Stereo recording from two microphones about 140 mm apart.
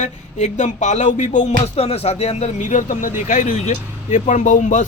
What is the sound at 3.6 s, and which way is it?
Speech, 60° left (ahead or behind).